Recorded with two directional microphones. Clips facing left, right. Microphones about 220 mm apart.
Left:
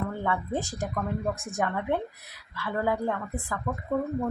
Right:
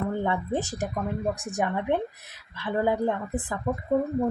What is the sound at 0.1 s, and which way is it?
A woman's voice, 20° right (ahead or behind).